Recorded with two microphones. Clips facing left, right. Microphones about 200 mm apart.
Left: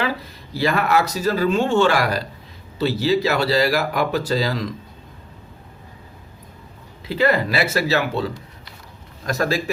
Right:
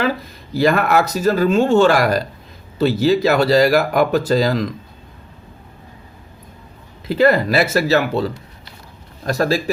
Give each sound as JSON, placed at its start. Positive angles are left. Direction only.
{"t": 0.5, "sound": "speech", "side_deg": -45}
{"t": 7.1, "sound": "speech", "side_deg": -40}